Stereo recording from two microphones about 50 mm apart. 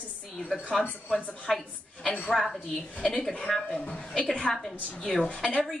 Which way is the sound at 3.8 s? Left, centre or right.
Left.